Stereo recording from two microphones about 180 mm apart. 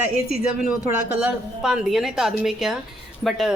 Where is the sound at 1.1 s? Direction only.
5° right (ahead or behind).